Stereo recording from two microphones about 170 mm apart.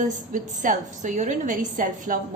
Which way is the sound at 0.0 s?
50° right (ahead or behind).